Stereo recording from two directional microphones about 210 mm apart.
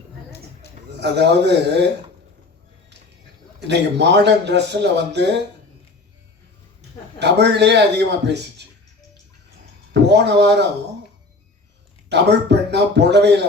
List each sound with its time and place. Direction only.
0.3 s a sound: 50° left (ahead or behind)
0.9 s speech: 55° right (ahead or behind)
3.7 s speech: 55° right (ahead or behind)
7.2 s speech: 55° right (ahead or behind)
9.9 s speech: 55° right (ahead or behind)
12.0 s speech: 55° right (ahead or behind)